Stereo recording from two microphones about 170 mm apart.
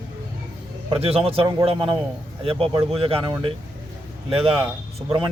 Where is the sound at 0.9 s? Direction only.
35° right (ahead or behind).